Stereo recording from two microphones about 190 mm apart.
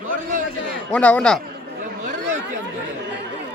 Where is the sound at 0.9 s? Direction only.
5° left (ahead or behind).